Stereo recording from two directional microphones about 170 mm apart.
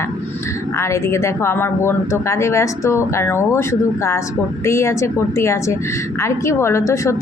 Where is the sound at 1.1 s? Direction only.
15° left (ahead or behind).